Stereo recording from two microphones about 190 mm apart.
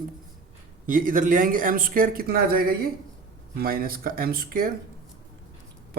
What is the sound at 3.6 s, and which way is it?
Speech, 50° right (ahead or behind).